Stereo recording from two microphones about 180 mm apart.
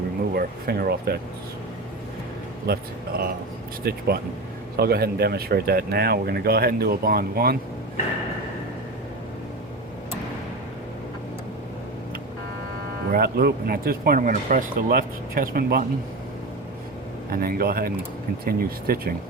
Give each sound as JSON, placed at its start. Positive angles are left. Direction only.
{"t": 0.3, "sound": "speech", "side_deg": -60}
{"t": 2.6, "sound": "speech", "side_deg": -60}
{"t": 13.1, "sound": "speech", "side_deg": -55}
{"t": 17.2, "sound": "speech", "side_deg": -55}